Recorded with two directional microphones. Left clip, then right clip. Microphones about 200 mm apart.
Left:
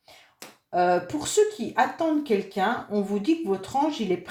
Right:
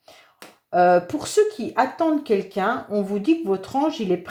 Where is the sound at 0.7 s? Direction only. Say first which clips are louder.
Right 6 dB; 35° right (ahead or behind).